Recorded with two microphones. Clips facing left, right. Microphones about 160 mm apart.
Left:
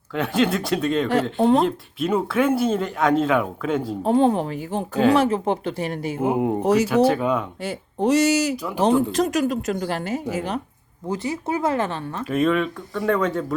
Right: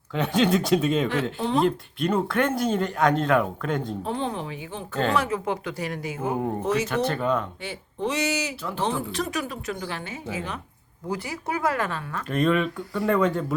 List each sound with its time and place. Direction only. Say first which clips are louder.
0.1 s speech: left 1 dB; centre (ahead or behind)
1.4 s speech: left 8 dB; 50° left (ahead or behind)
1.6 s speech: even; 5° left (ahead or behind)
4.0 s speech: left 10 dB; 45° left (ahead or behind)
5.1 s speech: left 6 dB; 30° left (ahead or behind)
6.3 s speech: left 4 dB; 15° left (ahead or behind)
6.6 s a woman's voice: left 7 dB; 40° left (ahead or behind)
6.8 s speech: left 6 dB; 5° left (ahead or behind)
7.6 s a woman's voice: left 6 dB; 40° left (ahead or behind)
11.1 s speech: left 5 dB; 20° left (ahead or behind)
12.2 s speech: left 2 dB; 5° left (ahead or behind)